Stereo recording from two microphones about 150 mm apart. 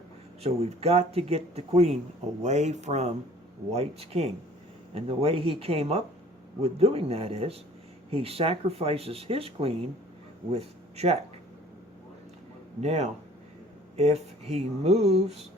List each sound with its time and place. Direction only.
0.4 s a man's voice: 40° right (ahead or behind)
12.8 s a man's voice: 45° right (ahead or behind)